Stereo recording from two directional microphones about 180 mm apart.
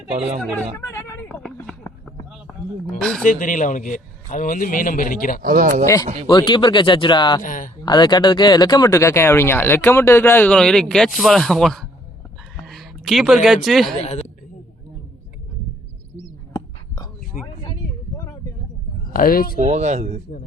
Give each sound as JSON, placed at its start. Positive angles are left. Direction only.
{"t": 0.9, "sound": "a sound", "side_deg": 15}
{"t": 3.0, "sound": "speech", "side_deg": 5}
{"t": 3.2, "sound": "a man's voice", "side_deg": 50}
{"t": 5.4, "sound": "speech", "side_deg": -50}
{"t": 5.8, "sound": "speech", "side_deg": 20}
{"t": 7.4, "sound": "speech", "side_deg": 50}
{"t": 7.8, "sound": "speech", "side_deg": 25}
{"t": 16.5, "sound": "a sound", "side_deg": 25}
{"t": 19.1, "sound": "a man's voice", "side_deg": 50}
{"t": 19.5, "sound": "speech", "side_deg": -40}